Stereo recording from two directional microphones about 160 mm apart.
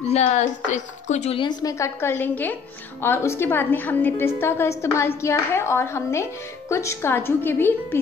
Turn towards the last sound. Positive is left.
turn(degrees=15)  # may be behind; listen again after turning